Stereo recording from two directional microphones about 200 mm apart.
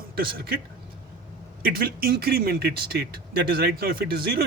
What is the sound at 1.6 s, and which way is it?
Speech, 50° right (ahead or behind).